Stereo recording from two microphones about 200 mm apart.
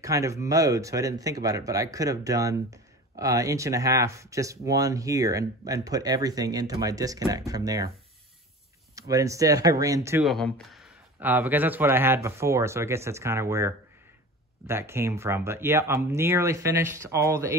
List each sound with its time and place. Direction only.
0.0 s speech: 15° right (ahead or behind)
8.9 s speech: 15° right (ahead or behind)
10.2 s speech: centre (ahead or behind); by 17.6 s 15° right (ahead or behind)